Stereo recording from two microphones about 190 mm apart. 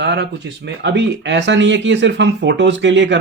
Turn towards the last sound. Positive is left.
turn(degrees=-70)  # may be behind; listen again after turning